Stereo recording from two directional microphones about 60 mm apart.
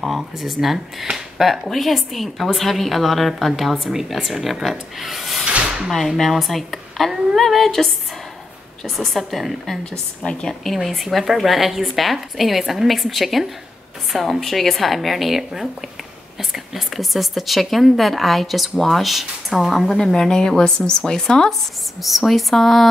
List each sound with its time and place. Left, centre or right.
0.0 s speech: centre
5.4 s drawer open or close: centre
5.9 s speech: centre
22.0 s speech: centre